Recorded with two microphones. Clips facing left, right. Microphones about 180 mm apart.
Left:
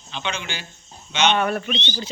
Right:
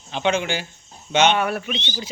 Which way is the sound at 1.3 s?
10° right (ahead or behind).